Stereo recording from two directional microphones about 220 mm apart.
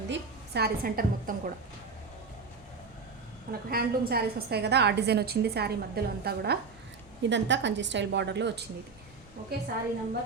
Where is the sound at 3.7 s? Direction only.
45° right (ahead or behind).